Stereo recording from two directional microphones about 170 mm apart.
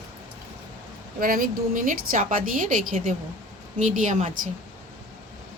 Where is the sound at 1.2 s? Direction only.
55° right (ahead or behind).